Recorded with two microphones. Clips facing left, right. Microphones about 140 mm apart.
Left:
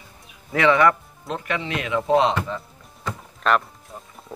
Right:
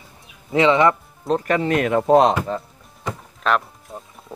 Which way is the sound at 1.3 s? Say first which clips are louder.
Right 8 dB; 45° right (ahead or behind).